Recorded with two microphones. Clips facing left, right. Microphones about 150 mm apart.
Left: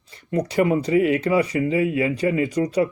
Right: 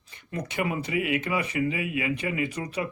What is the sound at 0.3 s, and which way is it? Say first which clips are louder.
Speech: left 10 dB; 35° left (ahead or behind).